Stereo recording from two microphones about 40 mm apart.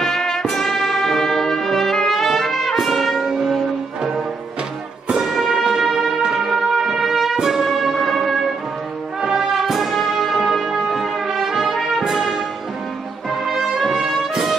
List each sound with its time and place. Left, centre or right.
0.0 s brass instrument: centre
5.1 s music: centre
9.7 s brass instrument: centre
12.1 s music: centre
13.5 s brass instrument: centre
14.3 s music: centre